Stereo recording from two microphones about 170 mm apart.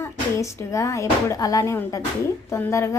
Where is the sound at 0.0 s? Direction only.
15° left (ahead or behind).